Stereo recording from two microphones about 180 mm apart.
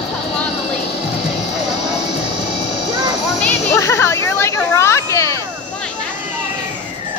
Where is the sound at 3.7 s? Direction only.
15° left (ahead or behind).